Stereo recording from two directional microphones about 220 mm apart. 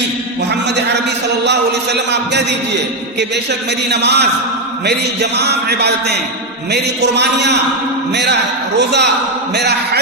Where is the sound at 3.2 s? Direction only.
50° right (ahead or behind).